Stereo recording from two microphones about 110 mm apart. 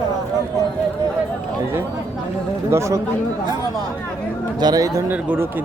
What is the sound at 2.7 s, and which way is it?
Speech, 25° right (ahead or behind).